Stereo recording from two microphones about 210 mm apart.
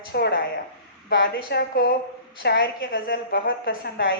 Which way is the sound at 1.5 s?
45° left (ahead or behind).